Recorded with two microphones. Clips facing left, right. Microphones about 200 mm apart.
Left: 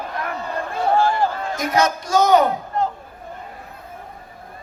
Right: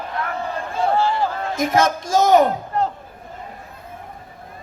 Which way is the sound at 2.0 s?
25° right (ahead or behind).